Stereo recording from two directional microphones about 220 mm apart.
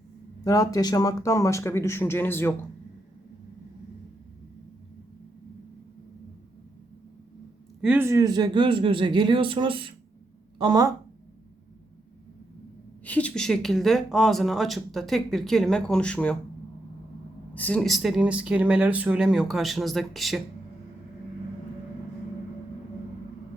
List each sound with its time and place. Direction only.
0.4 s speech: 15° left (ahead or behind)
7.8 s a man's voice: 5° right (ahead or behind)
13.1 s speech: 5° left (ahead or behind)
17.5 s speech: 5° left (ahead or behind)